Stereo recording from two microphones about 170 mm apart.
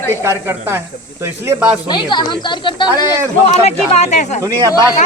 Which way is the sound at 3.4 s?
40° left (ahead or behind).